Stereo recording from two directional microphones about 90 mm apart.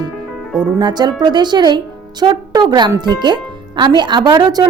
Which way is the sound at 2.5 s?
45° right (ahead or behind).